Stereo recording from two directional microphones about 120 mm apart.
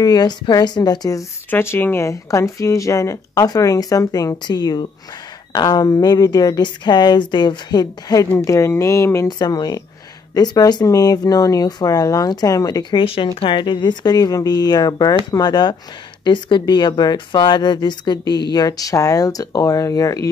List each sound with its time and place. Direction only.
0.0 s a woman's voice: 35° left (ahead or behind)
1.5 s a woman's voice: 20° left (ahead or behind)
13.0 s a woman's voice: 50° left (ahead or behind); by 20.2 s 30° left (ahead or behind)